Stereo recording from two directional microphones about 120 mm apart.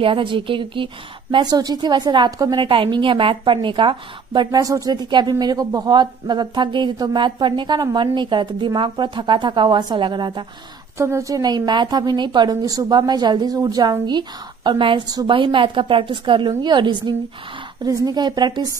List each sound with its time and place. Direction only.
0.0 s a woman's voice: 45° right (ahead or behind)
1.3 s a woman's voice: 35° right (ahead or behind)
11.0 s a woman's voice: 25° right (ahead or behind)